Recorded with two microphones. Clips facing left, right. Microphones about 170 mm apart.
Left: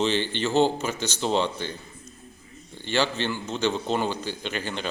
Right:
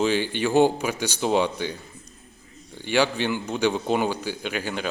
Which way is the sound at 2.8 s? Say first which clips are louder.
Right 3 dB; 10° right (ahead or behind).